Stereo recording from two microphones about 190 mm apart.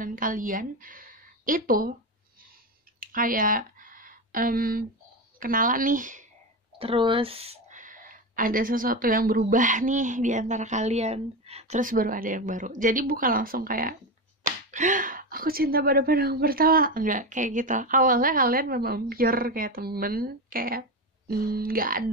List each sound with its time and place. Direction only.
0.0 s a woman's voice: 45° right (ahead or behind)
3.0 s a sound: 45° right (ahead or behind)
5.4 s speech: 45° right (ahead or behind)
6.8 s speech: 25° right (ahead or behind); by 22.1 s 50° right (ahead or behind)